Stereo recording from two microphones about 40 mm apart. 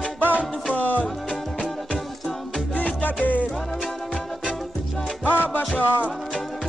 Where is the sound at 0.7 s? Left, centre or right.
Left.